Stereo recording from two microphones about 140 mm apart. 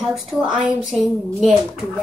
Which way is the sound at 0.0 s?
Centre (ahead or behind).